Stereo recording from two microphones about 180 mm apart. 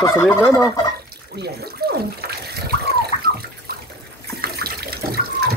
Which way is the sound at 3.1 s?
40° left (ahead or behind).